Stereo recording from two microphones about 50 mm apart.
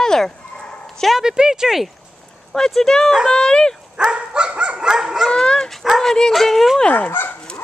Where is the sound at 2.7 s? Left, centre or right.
Centre.